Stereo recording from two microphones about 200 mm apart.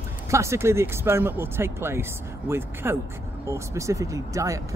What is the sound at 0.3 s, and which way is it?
Speech, 15° right (ahead or behind).